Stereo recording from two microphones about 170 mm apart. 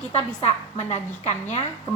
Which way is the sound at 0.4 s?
40° left (ahead or behind).